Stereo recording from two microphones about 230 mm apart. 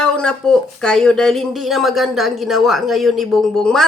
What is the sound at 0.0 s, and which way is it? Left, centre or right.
Speech, centre.